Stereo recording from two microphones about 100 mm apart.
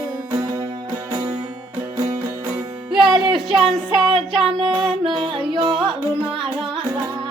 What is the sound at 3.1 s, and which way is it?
Child singing, 55° right (ahead or behind).